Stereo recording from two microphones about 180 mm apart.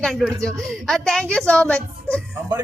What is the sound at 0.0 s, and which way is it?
Speech, centre (ahead or behind).